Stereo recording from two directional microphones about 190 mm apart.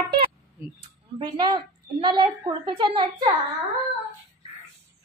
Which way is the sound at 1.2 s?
20° right (ahead or behind).